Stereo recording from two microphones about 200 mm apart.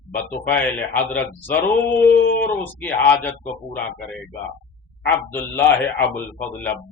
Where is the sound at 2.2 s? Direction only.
45° left (ahead or behind).